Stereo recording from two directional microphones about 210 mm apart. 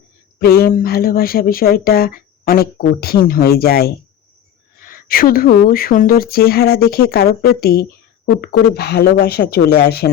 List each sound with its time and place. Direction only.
0.3 s speech: 45° left (ahead or behind)